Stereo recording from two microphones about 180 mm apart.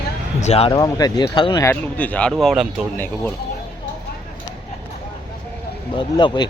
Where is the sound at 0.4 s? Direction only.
35° left (ahead or behind).